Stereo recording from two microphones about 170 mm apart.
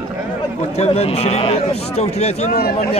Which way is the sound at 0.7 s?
35° left (ahead or behind).